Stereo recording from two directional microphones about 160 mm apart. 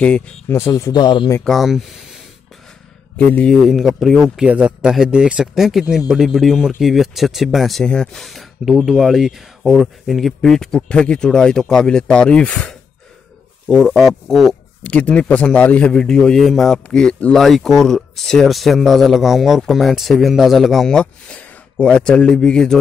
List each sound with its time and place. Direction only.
0.0 s speech: 10° left (ahead or behind); by 1.3 s 30° left (ahead or behind)
1.4 s speech: centre (ahead or behind)
3.2 s speech: 5° left (ahead or behind)